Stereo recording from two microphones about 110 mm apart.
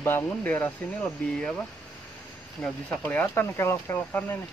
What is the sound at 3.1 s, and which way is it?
Speech, 15° left (ahead or behind).